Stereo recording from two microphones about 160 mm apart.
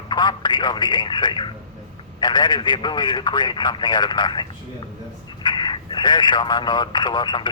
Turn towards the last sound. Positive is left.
turn(degrees=30)  # may be behind; listen again after turning